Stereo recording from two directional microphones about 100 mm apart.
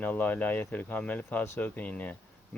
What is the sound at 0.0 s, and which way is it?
Speech, 20° left (ahead or behind).